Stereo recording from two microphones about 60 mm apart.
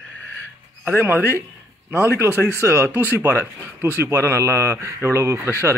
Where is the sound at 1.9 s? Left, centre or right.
Right.